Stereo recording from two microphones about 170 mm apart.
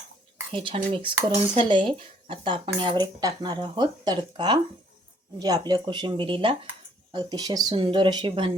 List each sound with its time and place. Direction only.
0.5 s speech: 30° right (ahead or behind)